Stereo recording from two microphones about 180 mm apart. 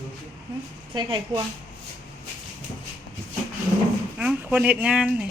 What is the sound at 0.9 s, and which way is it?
Speech, 25° right (ahead or behind).